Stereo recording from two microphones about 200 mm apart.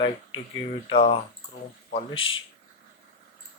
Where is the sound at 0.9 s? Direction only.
25° left (ahead or behind).